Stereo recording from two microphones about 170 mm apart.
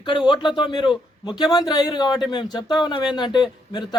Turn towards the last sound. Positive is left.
turn(degrees=25)  # may be behind; listen again after turning